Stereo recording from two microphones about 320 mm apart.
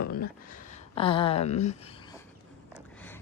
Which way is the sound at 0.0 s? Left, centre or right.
Left.